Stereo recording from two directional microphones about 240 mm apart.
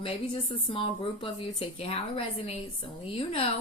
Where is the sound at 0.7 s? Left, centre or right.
Left.